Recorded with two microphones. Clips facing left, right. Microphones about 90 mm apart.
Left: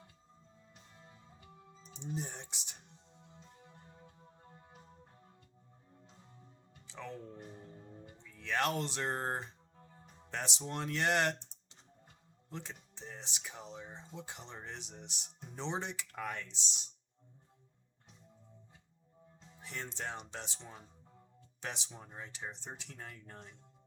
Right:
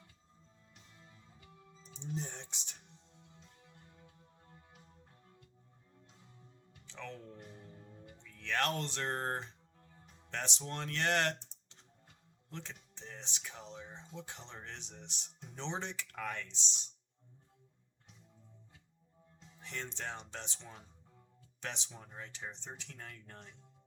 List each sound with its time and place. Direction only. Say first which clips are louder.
1.5 s music: left 2 dB; 5° left (ahead or behind)
2.0 s speech: left 1 dB; 15° left (ahead or behind)
3.7 s music: left 3 dB; 40° left (ahead or behind)
4.0 s music: left 4 dB; 5° left (ahead or behind)
6.8 s music: left 2 dB; 15° left (ahead or behind)
10.2 s speech: left 1 dB; 15° left (ahead or behind)
19.5 s speech: even; 15° left (ahead or behind)